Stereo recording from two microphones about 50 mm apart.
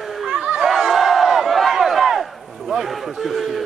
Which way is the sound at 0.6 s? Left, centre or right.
Centre.